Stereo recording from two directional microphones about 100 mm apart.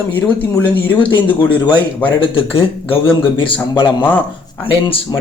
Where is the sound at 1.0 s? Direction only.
55° left (ahead or behind).